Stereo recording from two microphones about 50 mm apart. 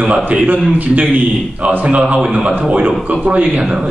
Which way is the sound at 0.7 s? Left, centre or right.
Right.